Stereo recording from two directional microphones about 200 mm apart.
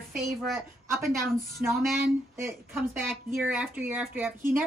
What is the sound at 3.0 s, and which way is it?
Speech, 10° right (ahead or behind).